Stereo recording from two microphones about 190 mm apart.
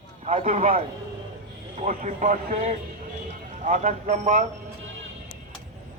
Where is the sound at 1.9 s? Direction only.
40° right (ahead or behind).